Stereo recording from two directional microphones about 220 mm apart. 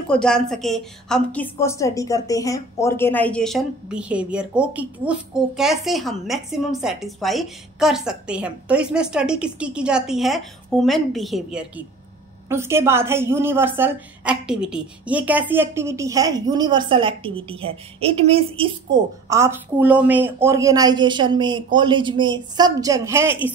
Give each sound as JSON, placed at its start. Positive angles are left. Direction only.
{"t": 0.1, "sound": "a woman's voice", "side_deg": 5}
{"t": 19.2, "sound": "a woman's voice", "side_deg": -10}